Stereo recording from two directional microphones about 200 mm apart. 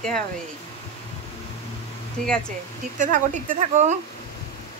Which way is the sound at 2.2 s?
5° left (ahead or behind).